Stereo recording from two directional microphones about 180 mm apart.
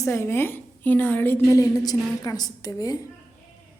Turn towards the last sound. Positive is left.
turn(degrees=20)  # may be behind; listen again after turning